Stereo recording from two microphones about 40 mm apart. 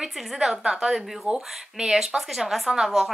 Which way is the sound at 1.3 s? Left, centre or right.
Centre.